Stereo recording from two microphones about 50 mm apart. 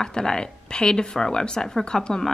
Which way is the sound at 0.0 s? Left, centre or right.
Centre.